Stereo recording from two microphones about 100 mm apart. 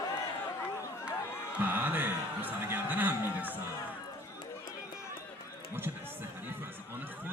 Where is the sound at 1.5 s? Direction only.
20° right (ahead or behind).